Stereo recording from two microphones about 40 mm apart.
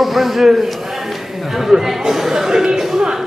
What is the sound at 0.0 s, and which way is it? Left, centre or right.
A man's voice, centre.